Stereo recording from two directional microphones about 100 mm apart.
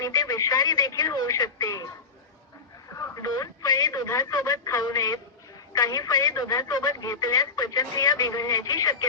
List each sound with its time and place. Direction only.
0.0 s speech: 40° left (ahead or behind)
3.0 s speech: 35° left (ahead or behind)